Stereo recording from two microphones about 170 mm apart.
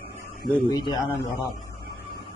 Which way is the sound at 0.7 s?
25° left (ahead or behind).